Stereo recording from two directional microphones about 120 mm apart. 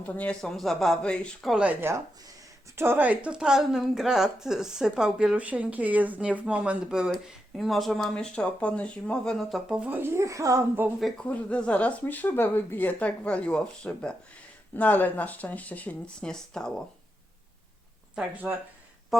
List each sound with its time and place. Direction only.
0.0 s a woman's voice: 10° left (ahead or behind)
1.6 s a woman's voice: 15° right (ahead or behind); by 9.7 s centre (ahead or behind)
9.7 s speech: 15° right (ahead or behind)
11.0 s speech: 10° left (ahead or behind)
18.1 s speech: 10° right (ahead or behind)